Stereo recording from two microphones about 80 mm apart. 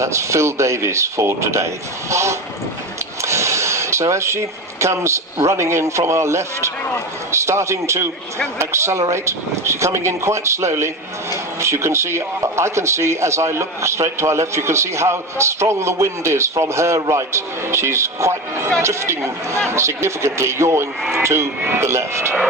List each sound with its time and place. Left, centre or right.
0.0 s speech: right
3.2 s a sound: right
5.4 s speech: right